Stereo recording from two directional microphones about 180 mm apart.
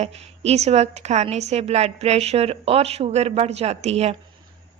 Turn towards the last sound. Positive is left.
turn(degrees=-35)  # may be behind; listen again after turning